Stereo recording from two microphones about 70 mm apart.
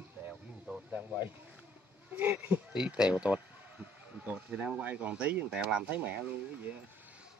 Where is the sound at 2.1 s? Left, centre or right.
Right.